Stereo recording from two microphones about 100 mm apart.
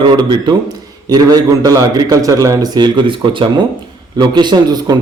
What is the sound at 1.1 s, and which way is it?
A man's voice, 40° right (ahead or behind).